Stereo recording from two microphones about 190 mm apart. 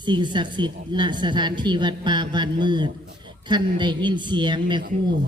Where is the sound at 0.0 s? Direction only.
25° right (ahead or behind).